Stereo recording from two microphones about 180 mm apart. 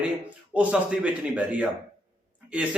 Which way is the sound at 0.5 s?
5° right (ahead or behind).